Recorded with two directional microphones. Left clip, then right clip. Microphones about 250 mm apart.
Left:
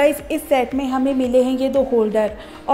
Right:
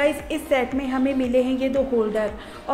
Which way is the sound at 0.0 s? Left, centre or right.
Left.